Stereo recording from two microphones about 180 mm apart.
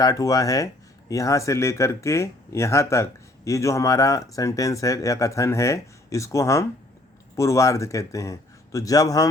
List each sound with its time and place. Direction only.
0.0 s speech: 20° left (ahead or behind)